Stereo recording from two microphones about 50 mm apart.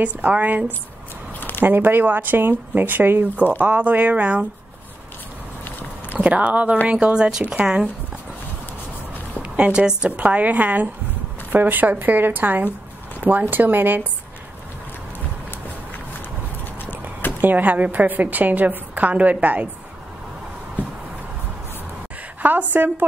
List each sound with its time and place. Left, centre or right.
0.0 s speech: right
1.6 s speech: right
6.1 s speech: right
9.4 s a woman's voice: right
10.0 s speech: right
17.4 s speech: right
22.4 s speech: right